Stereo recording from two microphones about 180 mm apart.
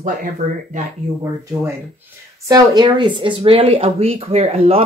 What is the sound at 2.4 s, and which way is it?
Speech, 20° right (ahead or behind).